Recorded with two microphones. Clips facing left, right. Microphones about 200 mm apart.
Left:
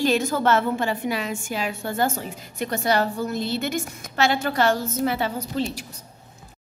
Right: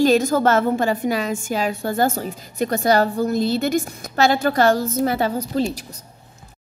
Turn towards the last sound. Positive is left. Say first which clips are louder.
# right 5 dB
turn(degrees=-40)  # may be behind; listen again after turning